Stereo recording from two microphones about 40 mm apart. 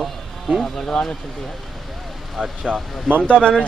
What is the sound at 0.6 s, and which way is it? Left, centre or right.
Speech, centre.